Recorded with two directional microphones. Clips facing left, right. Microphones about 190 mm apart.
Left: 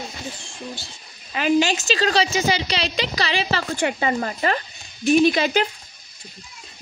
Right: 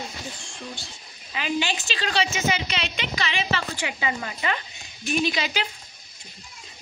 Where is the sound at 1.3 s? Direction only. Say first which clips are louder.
Left 8 dB; 45° left (ahead or behind).